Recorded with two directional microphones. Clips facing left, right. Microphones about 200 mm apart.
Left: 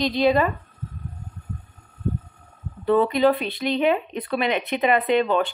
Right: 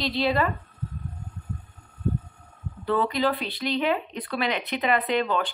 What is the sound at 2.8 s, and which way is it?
Speech, 20° left (ahead or behind).